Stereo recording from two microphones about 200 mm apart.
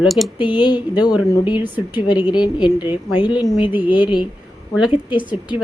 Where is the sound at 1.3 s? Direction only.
25° left (ahead or behind).